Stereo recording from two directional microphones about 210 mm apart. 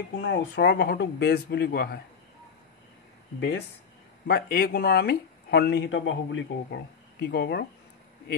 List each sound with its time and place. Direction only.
0.1 s speech: 55° left (ahead or behind)
4.3 s speech: 50° left (ahead or behind)